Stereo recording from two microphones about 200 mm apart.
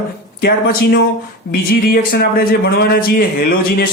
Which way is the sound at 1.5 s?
50° left (ahead or behind).